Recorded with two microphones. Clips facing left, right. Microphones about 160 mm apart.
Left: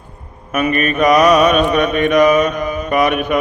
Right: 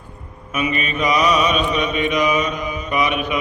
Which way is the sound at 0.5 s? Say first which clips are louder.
Left 6 dB; 50° left (ahead or behind).